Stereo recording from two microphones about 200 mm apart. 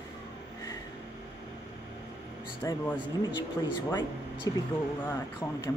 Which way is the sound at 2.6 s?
15° left (ahead or behind).